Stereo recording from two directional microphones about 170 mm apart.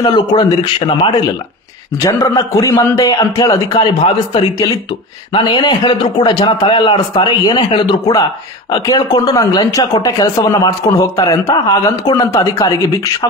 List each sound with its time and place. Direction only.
0.0 s speech: 25° left (ahead or behind)